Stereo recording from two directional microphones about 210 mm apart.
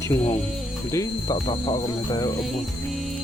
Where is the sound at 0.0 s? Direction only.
15° left (ahead or behind).